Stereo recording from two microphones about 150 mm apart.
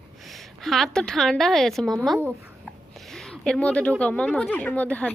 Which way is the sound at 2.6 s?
Centre (ahead or behind).